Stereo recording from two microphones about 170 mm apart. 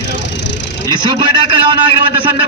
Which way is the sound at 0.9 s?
25° right (ahead or behind).